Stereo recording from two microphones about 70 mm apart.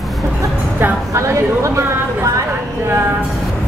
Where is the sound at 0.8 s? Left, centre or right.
Right.